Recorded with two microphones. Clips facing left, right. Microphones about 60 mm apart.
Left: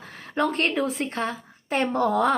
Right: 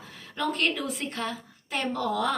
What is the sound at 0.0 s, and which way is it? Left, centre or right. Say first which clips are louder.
Speech: left 6 dB; left.